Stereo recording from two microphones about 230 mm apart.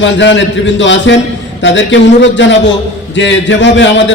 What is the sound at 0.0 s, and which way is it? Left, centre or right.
A man's voice, left.